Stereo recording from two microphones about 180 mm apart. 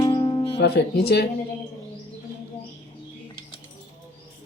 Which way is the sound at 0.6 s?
65° left (ahead or behind).